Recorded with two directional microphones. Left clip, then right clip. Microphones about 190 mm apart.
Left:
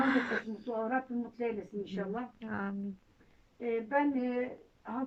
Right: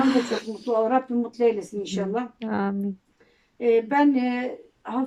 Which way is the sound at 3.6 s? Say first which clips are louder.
Right 15 dB; 10° right (ahead or behind).